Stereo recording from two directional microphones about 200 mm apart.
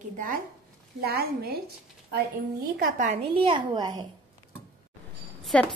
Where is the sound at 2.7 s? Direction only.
40° right (ahead or behind).